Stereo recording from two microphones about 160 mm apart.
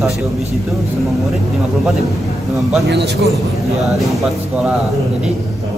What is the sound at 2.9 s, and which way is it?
Speech, 90° right.